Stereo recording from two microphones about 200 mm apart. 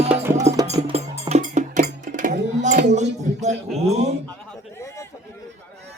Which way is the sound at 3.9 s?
35° right (ahead or behind).